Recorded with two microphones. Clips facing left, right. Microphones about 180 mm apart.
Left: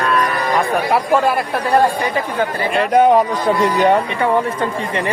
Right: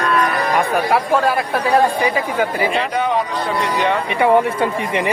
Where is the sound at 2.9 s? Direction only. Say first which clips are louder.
Left 10 dB; 45° left (ahead or behind).